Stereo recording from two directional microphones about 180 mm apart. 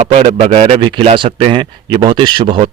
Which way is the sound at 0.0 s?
35° right (ahead or behind).